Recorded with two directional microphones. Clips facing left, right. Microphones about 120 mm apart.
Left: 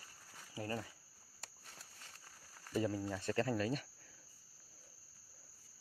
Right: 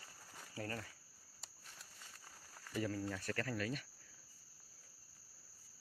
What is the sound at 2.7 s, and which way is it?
Speech, 20° left (ahead or behind).